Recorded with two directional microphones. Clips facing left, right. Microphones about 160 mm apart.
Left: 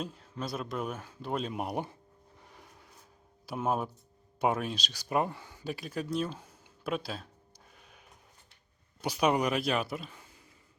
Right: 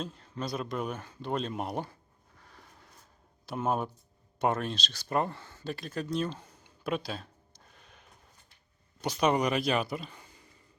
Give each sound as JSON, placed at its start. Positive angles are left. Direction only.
{"t": 0.0, "sound": "speech", "side_deg": 5}
{"t": 2.4, "sound": "a sound", "side_deg": 15}
{"t": 3.4, "sound": "speech", "side_deg": 5}
{"t": 7.7, "sound": "snort", "side_deg": 5}
{"t": 9.0, "sound": "speech", "side_deg": 5}